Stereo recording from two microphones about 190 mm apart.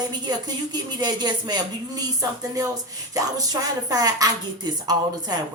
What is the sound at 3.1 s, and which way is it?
A woman's voice, 20° right (ahead or behind).